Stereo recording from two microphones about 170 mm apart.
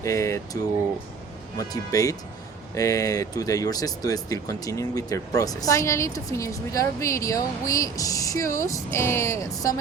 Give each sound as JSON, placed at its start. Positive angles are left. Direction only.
{"t": 0.0, "sound": "speech", "side_deg": 20}